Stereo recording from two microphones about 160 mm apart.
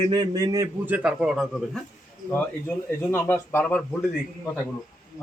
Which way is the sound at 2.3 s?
15° left (ahead or behind).